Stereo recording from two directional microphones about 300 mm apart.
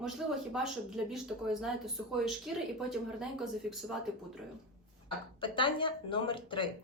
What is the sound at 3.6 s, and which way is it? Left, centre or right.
Speech, centre.